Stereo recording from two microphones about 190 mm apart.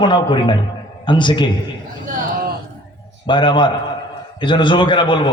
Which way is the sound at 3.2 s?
25° left (ahead or behind).